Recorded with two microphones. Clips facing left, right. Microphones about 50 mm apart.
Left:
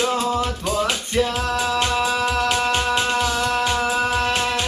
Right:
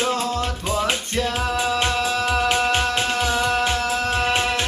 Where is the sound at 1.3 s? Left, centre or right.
Centre.